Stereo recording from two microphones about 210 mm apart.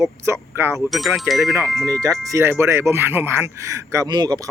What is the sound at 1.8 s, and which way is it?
Speech, 15° right (ahead or behind).